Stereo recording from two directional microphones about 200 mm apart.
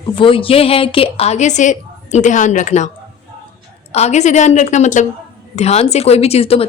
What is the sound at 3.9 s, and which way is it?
Speech, 35° left (ahead or behind).